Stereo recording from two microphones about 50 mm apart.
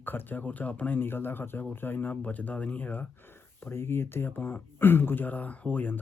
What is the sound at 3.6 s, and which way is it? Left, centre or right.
Speech, left.